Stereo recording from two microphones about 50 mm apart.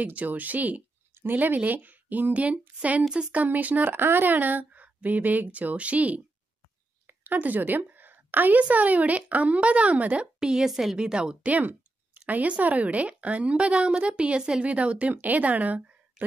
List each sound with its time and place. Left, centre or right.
0.0 s a woman's voice: right
3.4 s a woman's voice: right; by 10.7 s centre
10.7 s a woman's voice: centre
11.0 s a woman's voice: centre
11.4 s a sound: right
12.3 s a woman's voice: right